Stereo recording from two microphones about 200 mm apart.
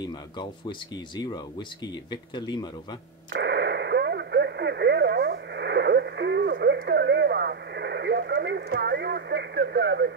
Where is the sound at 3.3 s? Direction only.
55° right (ahead or behind).